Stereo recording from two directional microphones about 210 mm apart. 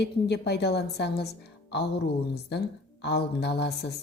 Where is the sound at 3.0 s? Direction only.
50° left (ahead or behind).